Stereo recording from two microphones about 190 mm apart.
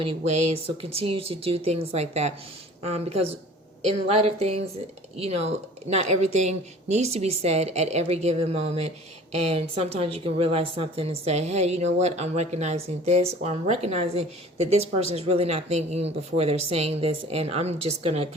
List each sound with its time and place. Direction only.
0.0 s speech: 30° right (ahead or behind)